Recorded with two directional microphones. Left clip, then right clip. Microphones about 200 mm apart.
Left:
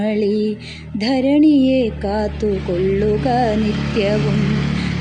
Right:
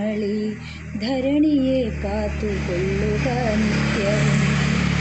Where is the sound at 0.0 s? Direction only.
60° left (ahead or behind).